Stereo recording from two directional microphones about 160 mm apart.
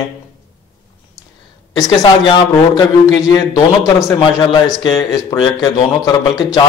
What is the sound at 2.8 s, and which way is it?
A man's voice, 25° left (ahead or behind).